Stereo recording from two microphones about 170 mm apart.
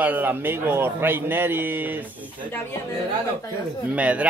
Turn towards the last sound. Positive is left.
turn(degrees=-10)  # may be behind; listen again after turning